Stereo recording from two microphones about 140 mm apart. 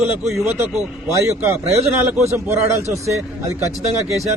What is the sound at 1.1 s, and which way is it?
A man's voice, 20° right (ahead or behind).